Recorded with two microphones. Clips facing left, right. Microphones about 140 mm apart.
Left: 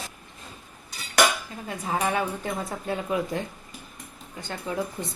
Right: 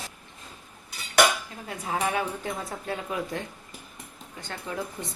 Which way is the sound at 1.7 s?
Centre (ahead or behind).